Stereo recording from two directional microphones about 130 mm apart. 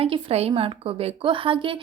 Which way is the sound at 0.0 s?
50° right (ahead or behind).